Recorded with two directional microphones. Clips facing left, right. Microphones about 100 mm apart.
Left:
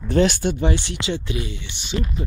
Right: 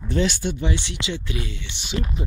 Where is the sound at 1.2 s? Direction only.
20° left (ahead or behind).